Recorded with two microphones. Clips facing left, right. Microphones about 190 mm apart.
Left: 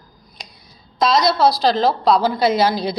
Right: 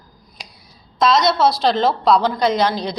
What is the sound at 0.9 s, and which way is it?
A woman's voice, centre (ahead or behind).